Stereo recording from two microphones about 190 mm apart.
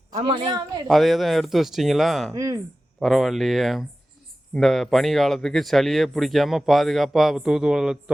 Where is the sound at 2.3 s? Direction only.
20° right (ahead or behind).